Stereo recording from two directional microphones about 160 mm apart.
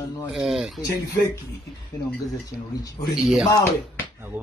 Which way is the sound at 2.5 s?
25° left (ahead or behind).